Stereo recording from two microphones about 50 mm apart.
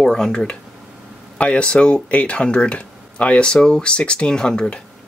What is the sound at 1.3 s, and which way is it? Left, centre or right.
Speech, left.